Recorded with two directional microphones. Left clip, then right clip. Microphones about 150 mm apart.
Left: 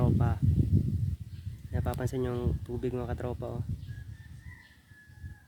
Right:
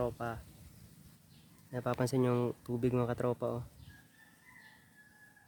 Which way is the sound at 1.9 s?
40° right (ahead or behind).